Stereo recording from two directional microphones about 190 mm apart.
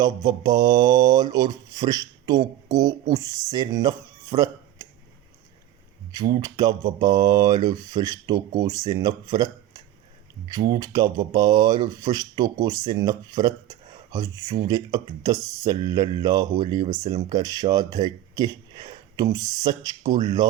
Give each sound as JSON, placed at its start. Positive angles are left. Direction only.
{"t": 0.0, "sound": "speech", "side_deg": -20}
{"t": 6.1, "sound": "speech", "side_deg": -20}